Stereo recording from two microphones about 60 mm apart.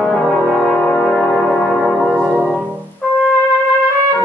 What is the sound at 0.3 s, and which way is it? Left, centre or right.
Brass instrument, centre.